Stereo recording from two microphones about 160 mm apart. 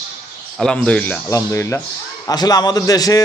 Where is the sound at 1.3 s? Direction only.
20° left (ahead or behind).